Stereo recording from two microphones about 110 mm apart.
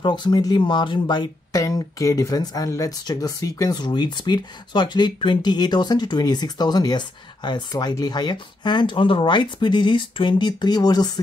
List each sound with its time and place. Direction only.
0.0 s speech: 45° left (ahead or behind)